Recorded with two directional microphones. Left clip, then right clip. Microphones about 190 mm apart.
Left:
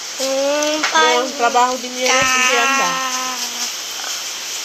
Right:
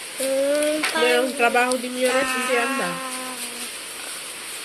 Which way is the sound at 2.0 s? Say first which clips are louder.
Left 8 dB; 10° right (ahead or behind).